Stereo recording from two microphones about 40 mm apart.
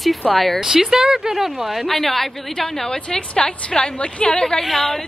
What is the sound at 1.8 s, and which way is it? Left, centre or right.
A woman's voice, centre.